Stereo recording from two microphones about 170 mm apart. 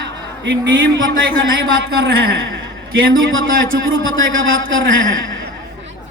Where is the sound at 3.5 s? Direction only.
55° right (ahead or behind).